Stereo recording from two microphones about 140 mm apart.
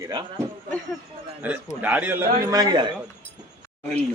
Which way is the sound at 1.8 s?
10° right (ahead or behind).